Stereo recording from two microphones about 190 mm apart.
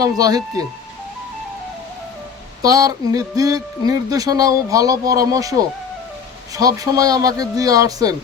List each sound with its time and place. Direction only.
0.0 s speech: 20° right (ahead or behind)
2.6 s speech: 20° right (ahead or behind)
6.6 s speech: 20° right (ahead or behind)